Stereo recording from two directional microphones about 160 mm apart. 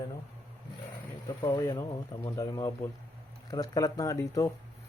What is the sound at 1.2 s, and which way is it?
Speech, 25° left (ahead or behind).